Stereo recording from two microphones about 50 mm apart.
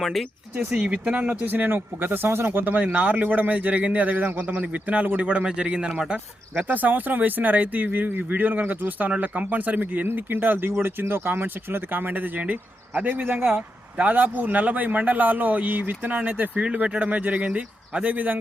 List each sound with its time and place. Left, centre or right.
0.0 s speech: centre
0.9 s speech: right
2.7 s a man's voice: right
6.7 s speech: right